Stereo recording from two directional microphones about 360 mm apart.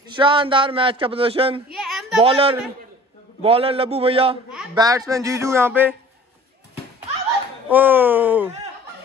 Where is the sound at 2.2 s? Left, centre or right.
Centre.